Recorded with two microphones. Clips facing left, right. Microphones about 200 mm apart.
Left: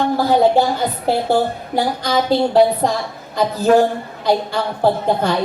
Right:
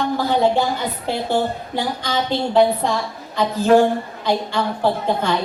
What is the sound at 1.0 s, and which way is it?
Speech, 40° left (ahead or behind).